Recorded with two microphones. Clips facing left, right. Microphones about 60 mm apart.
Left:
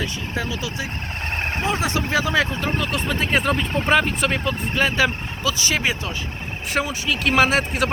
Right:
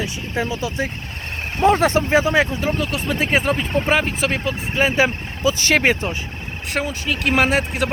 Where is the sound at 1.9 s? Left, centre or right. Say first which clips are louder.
Right 4 dB; right.